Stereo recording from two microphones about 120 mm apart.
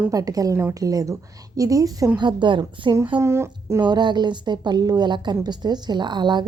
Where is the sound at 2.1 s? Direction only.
40° right (ahead or behind).